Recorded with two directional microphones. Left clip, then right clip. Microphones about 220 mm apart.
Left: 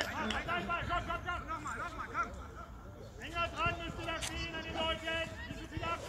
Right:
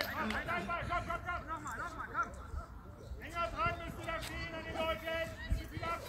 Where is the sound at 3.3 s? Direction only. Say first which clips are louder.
Left 1 dB; 40° right (ahead or behind).